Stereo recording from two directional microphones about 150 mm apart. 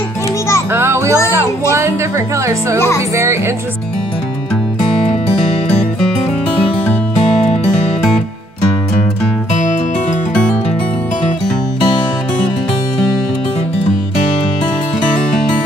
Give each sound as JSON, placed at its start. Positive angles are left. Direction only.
{"t": 0.7, "sound": "music", "side_deg": -15}
{"t": 1.3, "sound": "speech", "side_deg": -20}